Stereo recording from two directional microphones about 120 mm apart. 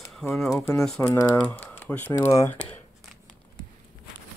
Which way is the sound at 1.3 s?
15° left (ahead or behind).